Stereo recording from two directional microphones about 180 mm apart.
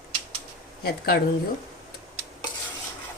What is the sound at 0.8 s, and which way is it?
Speech, 60° left (ahead or behind).